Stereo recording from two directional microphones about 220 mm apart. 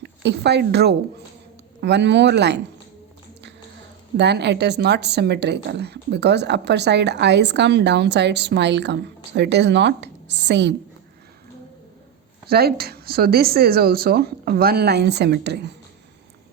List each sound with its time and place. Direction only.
0.0 s a woman's voice: 50° right (ahead or behind)
4.2 s a woman's voice: 50° right (ahead or behind)
12.5 s a woman's voice: 45° right (ahead or behind)